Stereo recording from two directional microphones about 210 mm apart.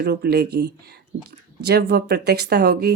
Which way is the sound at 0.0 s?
50° right (ahead or behind).